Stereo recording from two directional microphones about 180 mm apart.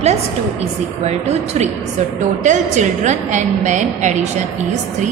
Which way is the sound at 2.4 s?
45° right (ahead or behind).